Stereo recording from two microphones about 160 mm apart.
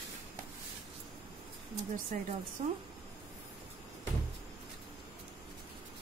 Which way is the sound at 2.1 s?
55° right (ahead or behind).